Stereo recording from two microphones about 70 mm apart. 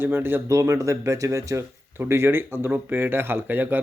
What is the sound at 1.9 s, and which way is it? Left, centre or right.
Speech, right.